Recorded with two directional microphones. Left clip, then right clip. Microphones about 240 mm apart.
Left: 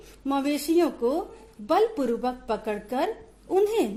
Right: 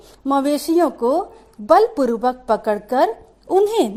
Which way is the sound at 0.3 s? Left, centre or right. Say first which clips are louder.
Right 8 dB; right.